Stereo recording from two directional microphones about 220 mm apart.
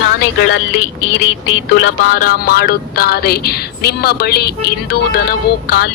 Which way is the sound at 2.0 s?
40° left (ahead or behind).